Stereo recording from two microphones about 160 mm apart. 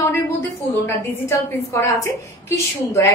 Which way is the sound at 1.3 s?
20° left (ahead or behind).